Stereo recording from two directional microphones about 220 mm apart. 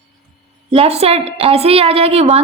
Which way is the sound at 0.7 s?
25° right (ahead or behind).